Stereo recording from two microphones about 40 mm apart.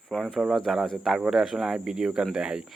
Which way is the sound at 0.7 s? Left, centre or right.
Centre.